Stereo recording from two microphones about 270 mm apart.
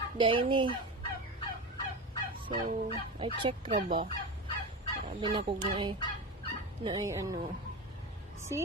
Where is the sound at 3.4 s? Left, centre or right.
Centre.